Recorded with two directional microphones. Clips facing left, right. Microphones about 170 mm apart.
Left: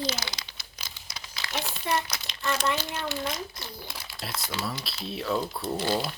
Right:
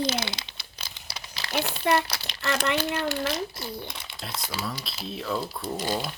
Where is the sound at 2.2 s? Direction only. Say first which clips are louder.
Right 1 dB; 75° right (ahead or behind); by 3.0 s 60° right (ahead or behind).